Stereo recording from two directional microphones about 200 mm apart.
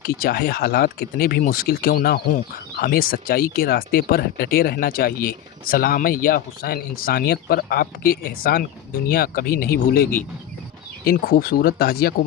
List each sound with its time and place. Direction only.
0.0 s speech: 50° left (ahead or behind)